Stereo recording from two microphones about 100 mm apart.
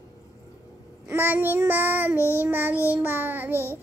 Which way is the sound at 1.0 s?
20° right (ahead or behind).